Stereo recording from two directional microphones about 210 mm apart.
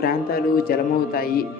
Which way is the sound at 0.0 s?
45° left (ahead or behind).